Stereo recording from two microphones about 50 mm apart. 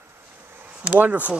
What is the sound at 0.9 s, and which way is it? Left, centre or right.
Speech, right.